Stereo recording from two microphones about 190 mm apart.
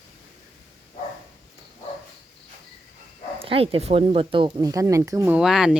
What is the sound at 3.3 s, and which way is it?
Speech, 30° right (ahead or behind).